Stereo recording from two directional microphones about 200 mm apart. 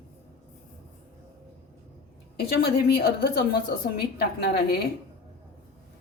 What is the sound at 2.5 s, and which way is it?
A woman's voice, 55° left (ahead or behind).